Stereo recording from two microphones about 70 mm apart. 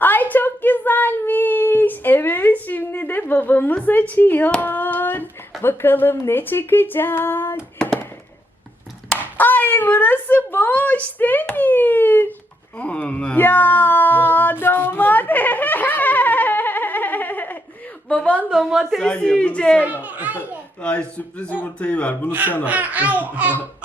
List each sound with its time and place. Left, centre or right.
0.0 s a sound: left
3.8 s a man's voice: left
4.6 s hands: left
5.6 s a man's voice: left
9.4 s a sound: left
18.1 s speech: centre
18.5 s a woman's voice: centre
19.0 s speech: centre
19.8 s a child's voice: right
20.8 s a man's voice: centre
22.3 s a child's voice: right